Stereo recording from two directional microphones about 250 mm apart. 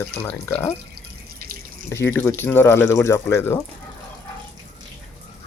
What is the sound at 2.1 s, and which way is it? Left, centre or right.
Speech, centre.